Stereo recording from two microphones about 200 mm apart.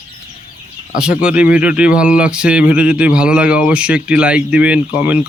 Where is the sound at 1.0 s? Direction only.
5° right (ahead or behind).